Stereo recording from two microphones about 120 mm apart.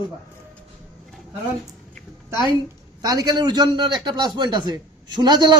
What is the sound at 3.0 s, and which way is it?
A man's voice, 30° right (ahead or behind).